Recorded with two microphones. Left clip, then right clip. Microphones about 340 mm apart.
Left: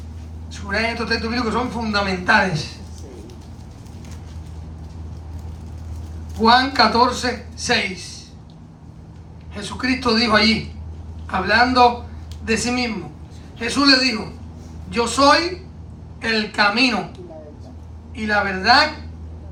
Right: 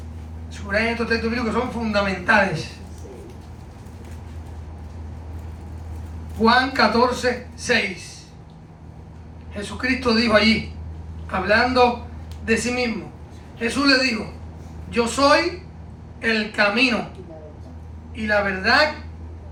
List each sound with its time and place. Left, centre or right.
0.5 s a man's voice: centre
6.4 s a man's voice: centre
9.6 s a man's voice: centre
18.1 s a man's voice: centre